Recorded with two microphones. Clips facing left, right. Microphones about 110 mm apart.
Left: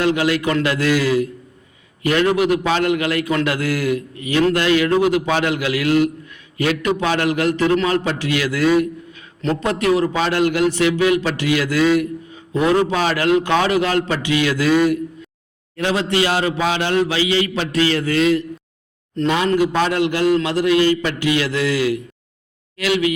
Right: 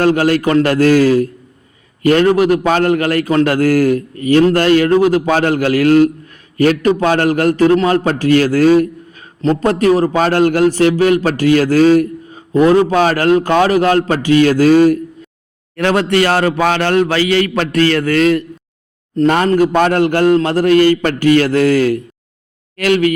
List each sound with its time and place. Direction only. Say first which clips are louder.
0.0 s a man's voice: right 5 dB; 45° right (ahead or behind)
15.7 s a man's voice: right 6 dB; 60° right (ahead or behind)